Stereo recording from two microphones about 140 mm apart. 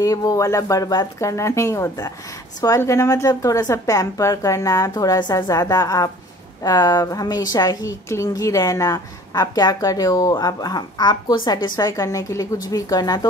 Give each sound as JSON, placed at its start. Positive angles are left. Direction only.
{"t": 0.0, "sound": "speech", "side_deg": 25}